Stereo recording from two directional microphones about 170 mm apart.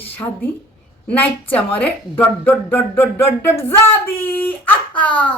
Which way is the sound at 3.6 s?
15° left (ahead or behind).